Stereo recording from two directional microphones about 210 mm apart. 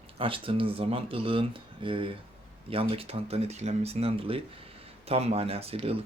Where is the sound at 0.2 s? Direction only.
25° right (ahead or behind).